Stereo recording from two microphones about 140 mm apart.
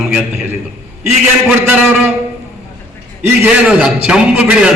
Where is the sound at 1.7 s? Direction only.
10° right (ahead or behind).